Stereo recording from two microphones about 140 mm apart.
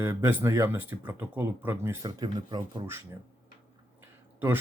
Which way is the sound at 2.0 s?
30° right (ahead or behind).